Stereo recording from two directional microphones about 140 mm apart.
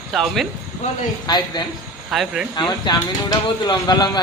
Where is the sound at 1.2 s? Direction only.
30° left (ahead or behind).